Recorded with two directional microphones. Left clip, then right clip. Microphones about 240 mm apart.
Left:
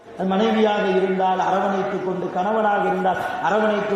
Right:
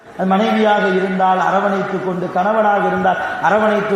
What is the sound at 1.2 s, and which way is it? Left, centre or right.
Mantra, right.